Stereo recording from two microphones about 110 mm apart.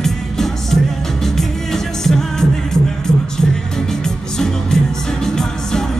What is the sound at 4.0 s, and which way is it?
Music, 5° left (ahead or behind).